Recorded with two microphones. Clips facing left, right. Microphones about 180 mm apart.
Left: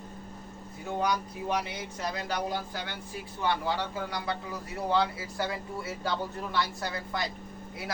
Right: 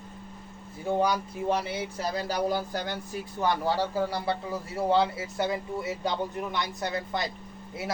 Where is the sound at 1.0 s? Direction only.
30° right (ahead or behind).